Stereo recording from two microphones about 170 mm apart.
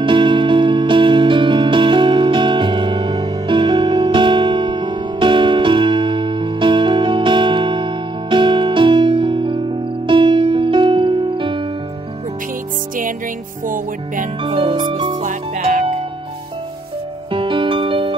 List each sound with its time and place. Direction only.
0.0 s music: 30° right (ahead or behind)
14.4 s music: 30° right (ahead or behind)
15.2 s music: 50° right (ahead or behind)
17.3 s music: 30° right (ahead or behind)